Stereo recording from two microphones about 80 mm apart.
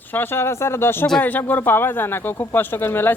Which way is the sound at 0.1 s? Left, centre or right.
Left.